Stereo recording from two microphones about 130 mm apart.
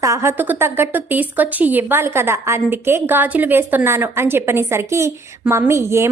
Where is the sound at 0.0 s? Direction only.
20° right (ahead or behind).